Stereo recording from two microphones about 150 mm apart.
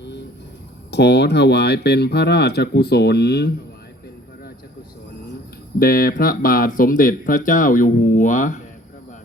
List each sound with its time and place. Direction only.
1.4 s speech: 90° left
5.8 s speech: 75° left (ahead or behind); by 8.6 s 55° left (ahead or behind)